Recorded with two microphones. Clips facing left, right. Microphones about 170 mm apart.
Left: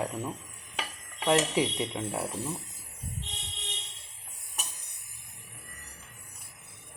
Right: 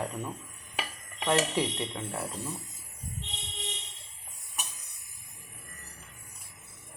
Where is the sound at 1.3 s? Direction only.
10° left (ahead or behind).